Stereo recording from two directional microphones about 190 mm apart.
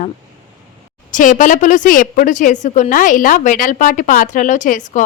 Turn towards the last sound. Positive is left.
turn(degrees=40)  # may be behind; listen again after turning